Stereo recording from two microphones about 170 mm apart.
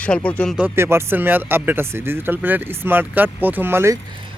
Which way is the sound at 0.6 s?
15° right (ahead or behind).